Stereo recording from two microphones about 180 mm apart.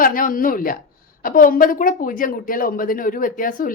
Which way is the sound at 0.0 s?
50° left (ahead or behind).